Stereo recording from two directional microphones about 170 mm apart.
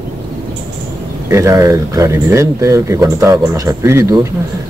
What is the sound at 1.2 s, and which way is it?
Speech, 20° right (ahead or behind).